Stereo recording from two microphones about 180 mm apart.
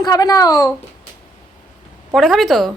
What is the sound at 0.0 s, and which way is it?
Speech, 20° left (ahead or behind).